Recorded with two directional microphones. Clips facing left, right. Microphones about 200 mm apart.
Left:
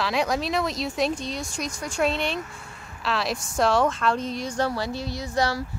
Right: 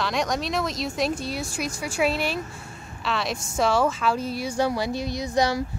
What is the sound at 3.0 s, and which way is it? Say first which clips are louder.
Speech: left 1 dB; centre (ahead or behind).